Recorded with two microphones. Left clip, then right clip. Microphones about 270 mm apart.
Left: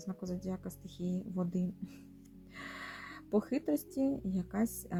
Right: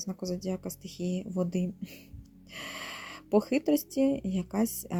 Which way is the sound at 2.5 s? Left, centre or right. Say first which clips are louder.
Right 6 dB; right.